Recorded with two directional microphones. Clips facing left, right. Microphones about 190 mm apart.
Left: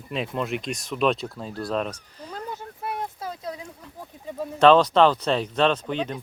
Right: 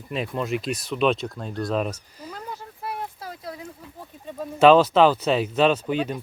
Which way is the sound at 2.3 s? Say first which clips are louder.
Left 2 dB; 20° left (ahead or behind).